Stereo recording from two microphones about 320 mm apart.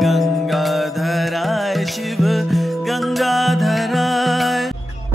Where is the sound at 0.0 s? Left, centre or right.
Centre.